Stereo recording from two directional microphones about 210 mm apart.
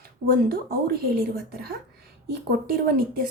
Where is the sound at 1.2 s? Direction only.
45° right (ahead or behind).